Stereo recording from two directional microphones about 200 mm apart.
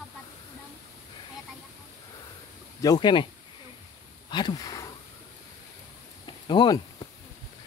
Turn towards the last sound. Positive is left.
turn(degrees=20)  # may be behind; listen again after turning